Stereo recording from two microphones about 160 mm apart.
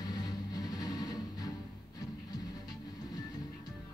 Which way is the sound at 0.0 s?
25° left (ahead or behind).